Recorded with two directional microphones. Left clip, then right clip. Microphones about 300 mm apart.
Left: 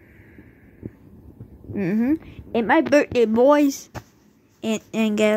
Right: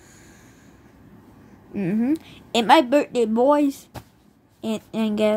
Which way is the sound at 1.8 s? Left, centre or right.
Centre.